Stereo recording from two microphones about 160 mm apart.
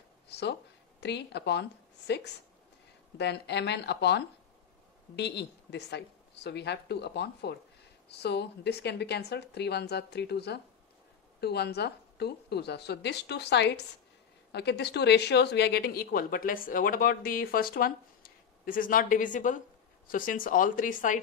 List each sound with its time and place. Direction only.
0.3 s speech: 90° left; by 21.2 s 55° left (ahead or behind)